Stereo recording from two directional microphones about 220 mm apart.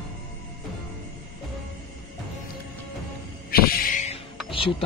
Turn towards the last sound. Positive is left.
turn(degrees=25)  # may be behind; listen again after turning